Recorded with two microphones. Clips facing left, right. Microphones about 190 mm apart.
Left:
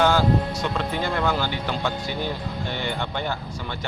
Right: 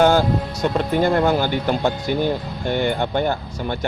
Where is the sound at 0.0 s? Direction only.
45° right (ahead or behind).